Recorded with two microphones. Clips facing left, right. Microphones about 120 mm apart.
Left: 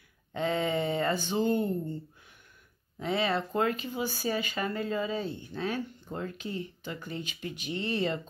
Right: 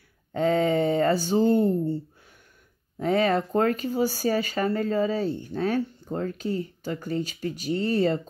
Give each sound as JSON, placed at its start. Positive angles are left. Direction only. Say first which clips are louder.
{"t": 0.3, "sound": "speech", "louder": "right 7 dB", "side_deg": -40}
{"t": 3.0, "sound": "speech", "louder": "right 7 dB", "side_deg": -45}